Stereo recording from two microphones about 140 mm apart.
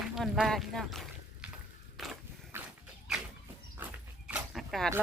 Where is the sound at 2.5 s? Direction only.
15° right (ahead or behind).